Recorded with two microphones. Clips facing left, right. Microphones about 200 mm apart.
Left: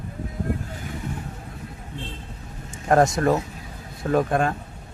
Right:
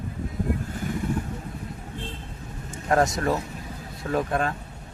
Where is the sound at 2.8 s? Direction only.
50° left (ahead or behind).